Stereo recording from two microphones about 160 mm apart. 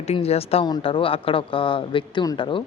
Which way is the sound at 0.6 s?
30° left (ahead or behind).